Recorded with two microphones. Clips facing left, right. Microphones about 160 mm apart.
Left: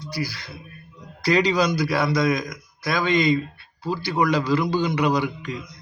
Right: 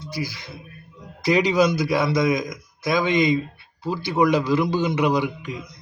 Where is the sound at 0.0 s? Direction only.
20° right (ahead or behind).